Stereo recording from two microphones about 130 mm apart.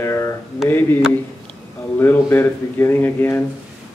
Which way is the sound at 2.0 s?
15° left (ahead or behind).